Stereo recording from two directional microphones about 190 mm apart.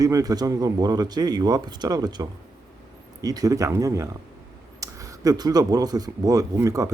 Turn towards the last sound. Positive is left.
turn(degrees=-15)  # may be behind; listen again after turning